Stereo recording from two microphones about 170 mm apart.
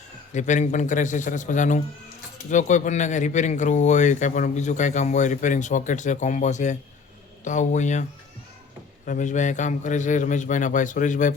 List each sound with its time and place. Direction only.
0.3 s speech: 45° left (ahead or behind)
9.0 s speech: 45° left (ahead or behind)